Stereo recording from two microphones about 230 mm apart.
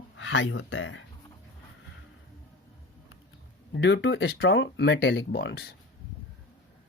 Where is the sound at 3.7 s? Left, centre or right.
Left.